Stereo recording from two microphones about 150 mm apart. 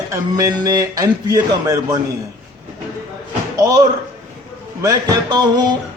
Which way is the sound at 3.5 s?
25° right (ahead or behind).